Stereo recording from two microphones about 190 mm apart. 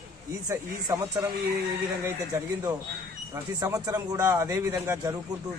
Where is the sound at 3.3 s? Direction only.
15° right (ahead or behind).